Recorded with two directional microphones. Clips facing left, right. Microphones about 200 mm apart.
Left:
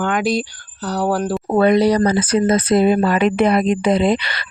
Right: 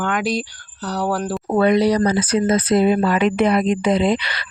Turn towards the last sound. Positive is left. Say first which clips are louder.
# left 2 dB
turn(degrees=50)  # may be behind; listen again after turning